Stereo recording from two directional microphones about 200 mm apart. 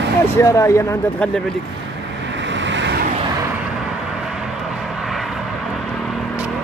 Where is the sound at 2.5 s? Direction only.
65° right (ahead or behind).